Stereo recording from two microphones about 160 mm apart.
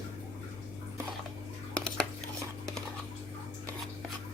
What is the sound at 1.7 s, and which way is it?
Cutlery, 5° left (ahead or behind).